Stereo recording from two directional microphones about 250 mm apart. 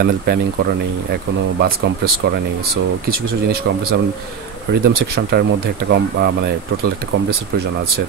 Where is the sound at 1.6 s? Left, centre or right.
Right.